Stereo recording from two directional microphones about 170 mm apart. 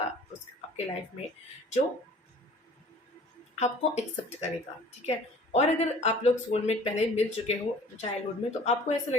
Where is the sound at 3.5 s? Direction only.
40° left (ahead or behind).